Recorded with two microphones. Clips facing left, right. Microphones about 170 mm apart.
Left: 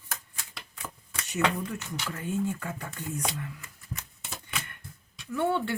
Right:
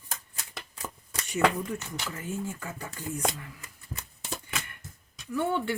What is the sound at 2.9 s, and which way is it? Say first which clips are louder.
Speech: right 5 dB; 40° right (ahead or behind).